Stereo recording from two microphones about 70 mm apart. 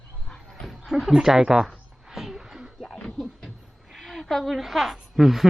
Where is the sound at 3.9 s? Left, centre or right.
Centre.